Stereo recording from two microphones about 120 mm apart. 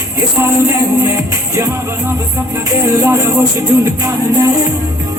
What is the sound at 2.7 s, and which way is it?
Music, 25° right (ahead or behind).